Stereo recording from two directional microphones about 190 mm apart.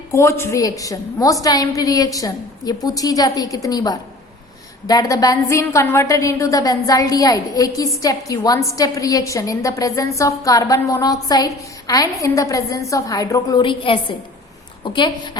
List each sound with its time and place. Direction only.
0.1 s a woman's voice: 15° left (ahead or behind)